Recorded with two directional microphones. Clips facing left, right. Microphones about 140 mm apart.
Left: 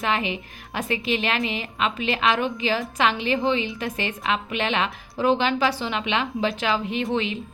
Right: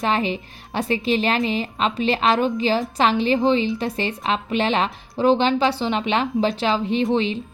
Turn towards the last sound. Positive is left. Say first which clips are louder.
# right 5 dB
turn(degrees=-30)  # may be behind; listen again after turning